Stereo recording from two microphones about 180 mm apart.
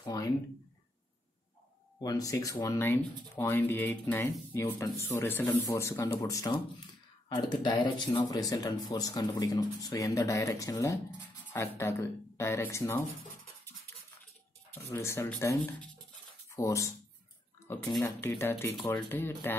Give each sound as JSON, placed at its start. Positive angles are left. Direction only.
{"t": 0.0, "sound": "a sound", "side_deg": 20}
{"t": 2.0, "sound": "speech", "side_deg": 20}
{"t": 14.7, "sound": "speech", "side_deg": 15}
{"t": 18.0, "sound": "speech", "side_deg": 15}